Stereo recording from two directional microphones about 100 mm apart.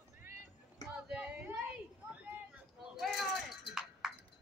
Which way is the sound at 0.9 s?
10° right (ahead or behind).